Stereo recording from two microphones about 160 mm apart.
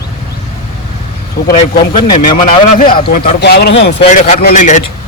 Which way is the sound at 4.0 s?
50° left (ahead or behind).